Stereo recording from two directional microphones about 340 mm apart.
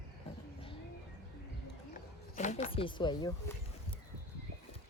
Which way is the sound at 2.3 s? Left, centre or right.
Left.